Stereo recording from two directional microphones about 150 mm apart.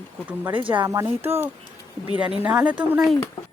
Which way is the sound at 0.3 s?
10° right (ahead or behind).